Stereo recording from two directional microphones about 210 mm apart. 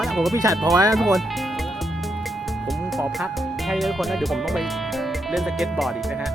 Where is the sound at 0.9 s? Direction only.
Centre (ahead or behind).